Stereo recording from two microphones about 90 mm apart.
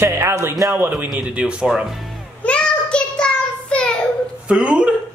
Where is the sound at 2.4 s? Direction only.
10° left (ahead or behind).